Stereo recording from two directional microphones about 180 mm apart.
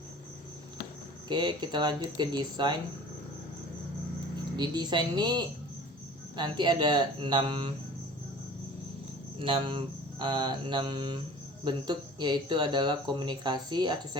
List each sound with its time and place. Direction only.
1.3 s speech: 25° right (ahead or behind)
4.5 s speech: 25° right (ahead or behind)
9.4 s speech: 30° right (ahead or behind)